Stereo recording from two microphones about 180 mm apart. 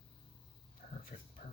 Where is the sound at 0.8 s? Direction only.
45° left (ahead or behind).